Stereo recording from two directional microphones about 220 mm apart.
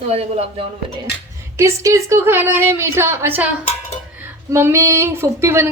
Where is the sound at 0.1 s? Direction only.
30° right (ahead or behind).